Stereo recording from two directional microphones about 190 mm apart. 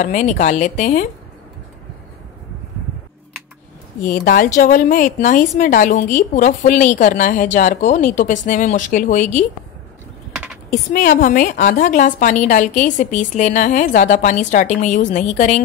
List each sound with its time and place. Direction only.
0.0 s a woman's voice: 40° left (ahead or behind)
4.0 s a woman's voice: 50° left (ahead or behind)
10.3 s typing: 5° right (ahead or behind)
10.9 s a woman's voice: 45° left (ahead or behind)